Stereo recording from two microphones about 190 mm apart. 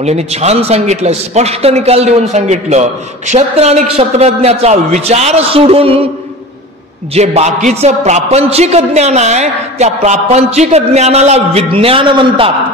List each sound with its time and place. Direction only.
0.0 s a woman's voice: 35° right (ahead or behind)
7.2 s a woman's voice: 35° right (ahead or behind)